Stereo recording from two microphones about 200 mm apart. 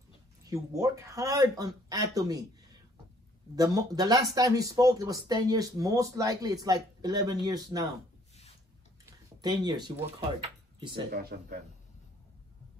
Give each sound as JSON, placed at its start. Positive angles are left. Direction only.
{"t": 0.5, "sound": "speech", "side_deg": -15}
{"t": 3.5, "sound": "speech", "side_deg": -20}
{"t": 9.4, "sound": "speech", "side_deg": -20}
{"t": 11.1, "sound": "speech", "side_deg": -50}